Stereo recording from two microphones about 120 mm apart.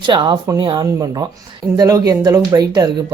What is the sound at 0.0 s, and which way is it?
Speech, 40° right (ahead or behind).